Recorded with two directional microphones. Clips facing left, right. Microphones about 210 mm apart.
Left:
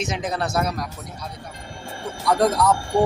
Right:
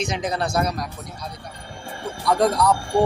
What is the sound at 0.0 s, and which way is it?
Speech, 5° left (ahead or behind).